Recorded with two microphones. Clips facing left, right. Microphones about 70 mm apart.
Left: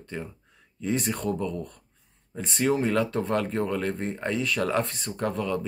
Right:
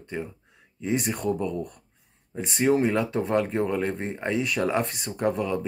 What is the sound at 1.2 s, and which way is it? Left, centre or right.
Speech, right.